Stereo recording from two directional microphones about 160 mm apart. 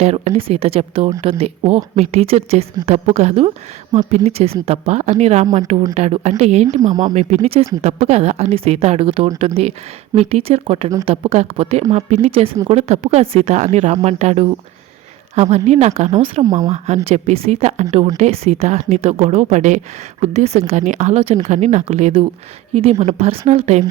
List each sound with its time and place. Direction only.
0.0 s speech: 40° right (ahead or behind)
16.4 s speech: 20° right (ahead or behind)
16.6 s speech: 45° right (ahead or behind)